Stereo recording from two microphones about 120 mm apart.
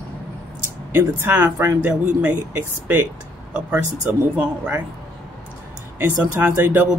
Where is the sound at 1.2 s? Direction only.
20° right (ahead or behind).